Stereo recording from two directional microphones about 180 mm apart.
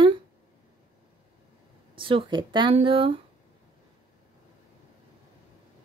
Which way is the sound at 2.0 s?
30° right (ahead or behind).